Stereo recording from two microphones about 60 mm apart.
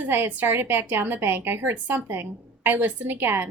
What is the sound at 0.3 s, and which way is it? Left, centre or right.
A woman's voice, right.